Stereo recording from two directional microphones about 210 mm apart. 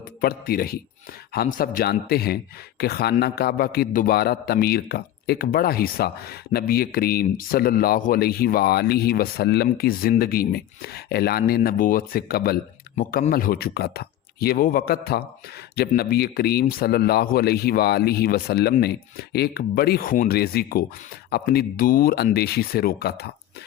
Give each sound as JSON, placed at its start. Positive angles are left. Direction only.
{"t": 0.2, "sound": "speech", "side_deg": 45}